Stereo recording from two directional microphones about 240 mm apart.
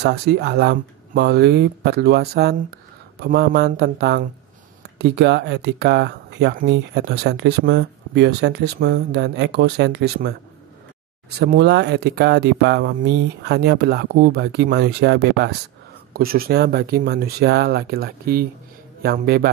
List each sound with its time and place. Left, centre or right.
0.0 s speech: right
11.3 s speech: right